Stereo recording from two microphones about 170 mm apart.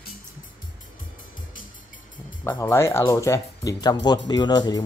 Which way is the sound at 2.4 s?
15° left (ahead or behind).